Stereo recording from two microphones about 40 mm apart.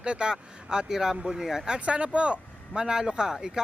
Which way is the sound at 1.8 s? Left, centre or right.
Right.